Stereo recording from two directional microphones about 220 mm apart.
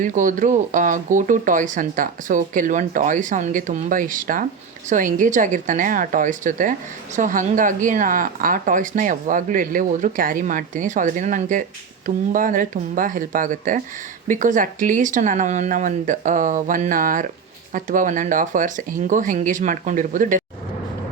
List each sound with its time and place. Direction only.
0.0 s speech: 35° right (ahead or behind)